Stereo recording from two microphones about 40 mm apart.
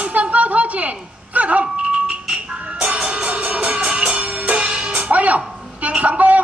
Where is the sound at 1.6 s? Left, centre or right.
Right.